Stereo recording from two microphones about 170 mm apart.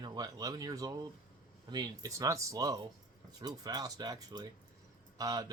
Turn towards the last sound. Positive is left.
turn(degrees=-20)  # may be behind; listen again after turning